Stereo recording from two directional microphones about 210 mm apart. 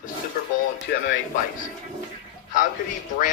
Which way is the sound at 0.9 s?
50° left (ahead or behind).